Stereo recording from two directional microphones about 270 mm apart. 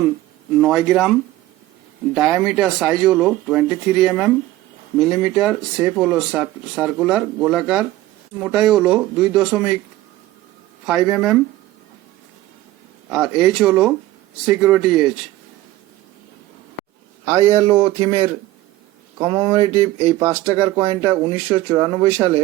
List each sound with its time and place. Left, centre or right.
0.6 s speech: centre
2.1 s speech: centre
10.8 s speech: centre
13.1 s speech: centre
17.2 s speech: centre